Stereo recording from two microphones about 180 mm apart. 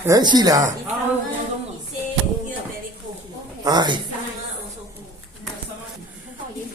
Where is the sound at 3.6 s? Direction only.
25° right (ahead or behind).